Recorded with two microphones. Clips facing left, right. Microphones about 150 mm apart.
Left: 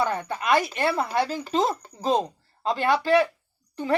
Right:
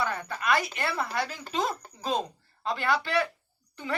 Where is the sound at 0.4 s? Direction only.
25° left (ahead or behind).